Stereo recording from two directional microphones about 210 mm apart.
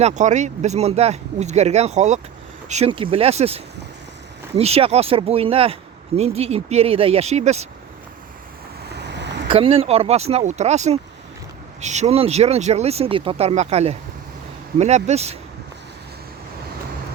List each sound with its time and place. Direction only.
0.0 s speech: 35° right (ahead or behind)
8.9 s vehicle: 55° right (ahead or behind)
9.5 s speech: 25° right (ahead or behind)